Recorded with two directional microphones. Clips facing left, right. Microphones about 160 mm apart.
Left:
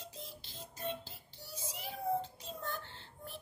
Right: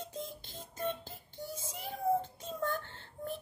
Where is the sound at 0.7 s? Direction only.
50° right (ahead or behind).